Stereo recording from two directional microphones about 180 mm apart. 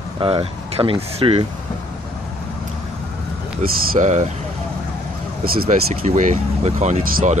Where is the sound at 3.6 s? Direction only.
50° right (ahead or behind).